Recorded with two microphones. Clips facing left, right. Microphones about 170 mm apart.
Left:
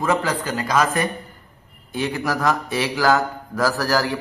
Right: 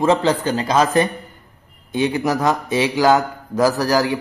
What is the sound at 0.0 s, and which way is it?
A man's voice, 25° right (ahead or behind).